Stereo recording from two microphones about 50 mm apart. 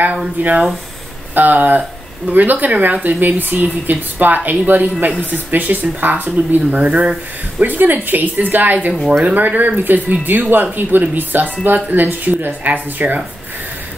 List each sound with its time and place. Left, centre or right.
0.4 s speech: right
7.6 s speech: right